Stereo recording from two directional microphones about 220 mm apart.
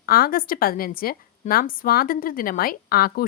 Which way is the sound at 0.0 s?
40° left (ahead or behind).